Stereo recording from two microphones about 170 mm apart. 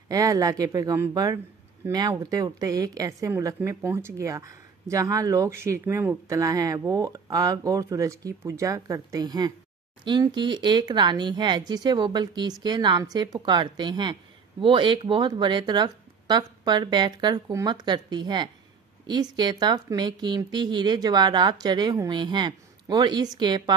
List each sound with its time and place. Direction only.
0.1 s a woman's voice: 20° right (ahead or behind)